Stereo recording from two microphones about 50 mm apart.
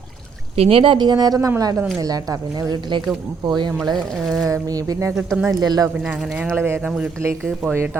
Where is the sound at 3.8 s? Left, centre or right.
Centre.